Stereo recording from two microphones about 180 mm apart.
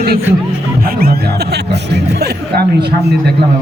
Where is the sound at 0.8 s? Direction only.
55° right (ahead or behind).